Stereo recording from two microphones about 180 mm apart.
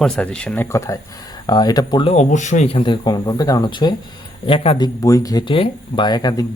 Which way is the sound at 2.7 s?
25° left (ahead or behind).